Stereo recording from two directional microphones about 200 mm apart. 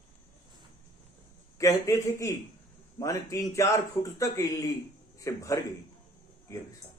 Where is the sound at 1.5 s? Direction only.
15° left (ahead or behind).